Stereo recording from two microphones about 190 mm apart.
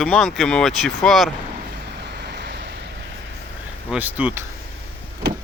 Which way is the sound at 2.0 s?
60° right (ahead or behind).